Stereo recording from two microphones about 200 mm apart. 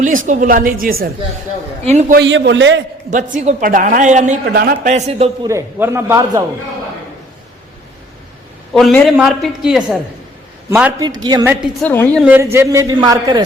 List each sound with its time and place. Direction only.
0.3 s a woman's voice: 40° right (ahead or behind)
1.9 s a man's voice: 35° right (ahead or behind)
2.1 s a man's voice: 60° right (ahead or behind)
3.1 s a man's voice: 40° right (ahead or behind)
5.5 s a man's voice: 15° right (ahead or behind)
8.7 s a man's voice: centre (ahead or behind)
11.0 s speech: 20° right (ahead or behind)
11.8 s a woman's voice: 10° left (ahead or behind)
12.2 s a man's voice: 10° right (ahead or behind)